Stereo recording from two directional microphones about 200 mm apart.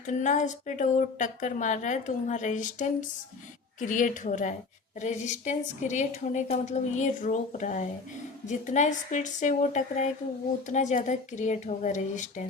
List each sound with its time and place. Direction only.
0.0 s speech: 40° left (ahead or behind)